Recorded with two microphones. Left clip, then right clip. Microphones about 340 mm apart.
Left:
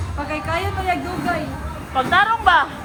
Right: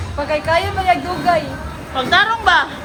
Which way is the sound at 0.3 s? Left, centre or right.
Right.